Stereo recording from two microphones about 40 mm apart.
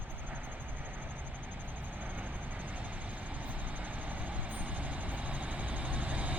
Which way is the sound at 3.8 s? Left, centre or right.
Right.